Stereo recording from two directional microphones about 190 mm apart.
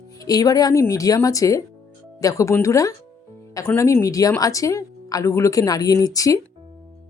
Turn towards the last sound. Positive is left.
turn(degrees=20)  # may be behind; listen again after turning